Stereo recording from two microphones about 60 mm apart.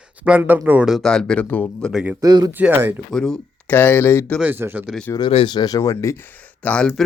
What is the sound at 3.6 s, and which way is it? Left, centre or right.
Speech, left.